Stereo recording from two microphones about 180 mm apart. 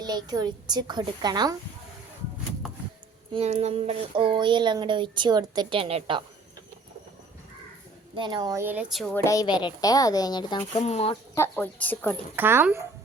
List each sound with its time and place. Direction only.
0.0 s speech: 20° right (ahead or behind)
3.3 s speech: 35° right (ahead or behind)
8.1 s speech: 25° right (ahead or behind); by 9.1 s centre (ahead or behind)
9.1 s a woman's voice: 15° left (ahead or behind)
10.7 s speech: 35° left (ahead or behind)
11.3 s a woman's voice: 10° left (ahead or behind)
12.4 s speech: 10° right (ahead or behind)